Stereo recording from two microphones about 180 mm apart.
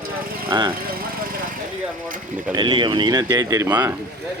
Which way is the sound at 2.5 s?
25° right (ahead or behind).